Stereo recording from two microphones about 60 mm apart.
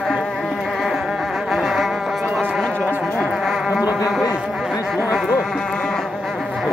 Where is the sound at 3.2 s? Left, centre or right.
Centre.